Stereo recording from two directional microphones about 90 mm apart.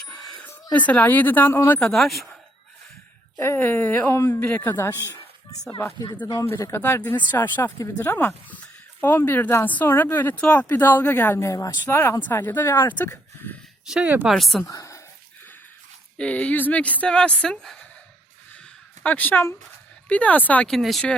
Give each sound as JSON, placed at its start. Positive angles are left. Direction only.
{"t": 0.1, "sound": "a sound", "side_deg": 5}
{"t": 0.7, "sound": "speech", "side_deg": 15}
{"t": 1.8, "sound": "speech", "side_deg": 0}
{"t": 3.3, "sound": "speech", "side_deg": 30}
{"t": 6.4, "sound": "speech", "side_deg": 30}
{"t": 11.3, "sound": "speech", "side_deg": 40}
{"t": 11.9, "sound": "speech", "side_deg": 25}
{"t": 13.8, "sound": "speech", "side_deg": -5}
{"t": 14.7, "sound": "whispering", "side_deg": 35}
{"t": 16.1, "sound": "speech", "side_deg": 15}
{"t": 18.6, "sound": "a sound", "side_deg": 15}
{"t": 20.1, "sound": "speech", "side_deg": 15}
{"t": 20.7, "sound": "speech", "side_deg": 0}